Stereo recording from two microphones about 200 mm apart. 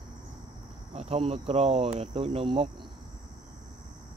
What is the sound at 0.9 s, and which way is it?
Speech, 30° right (ahead or behind).